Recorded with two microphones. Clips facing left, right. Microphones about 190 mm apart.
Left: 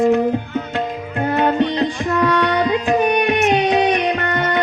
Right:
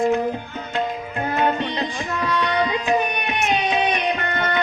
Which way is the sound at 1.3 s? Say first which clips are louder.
Left 5 dB; 65° left (ahead or behind).